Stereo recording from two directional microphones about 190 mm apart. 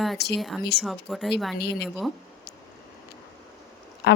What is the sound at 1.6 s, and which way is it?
Speech, 60° left (ahead or behind).